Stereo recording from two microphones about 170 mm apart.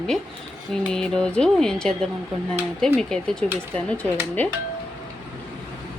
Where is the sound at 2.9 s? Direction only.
5° left (ahead or behind).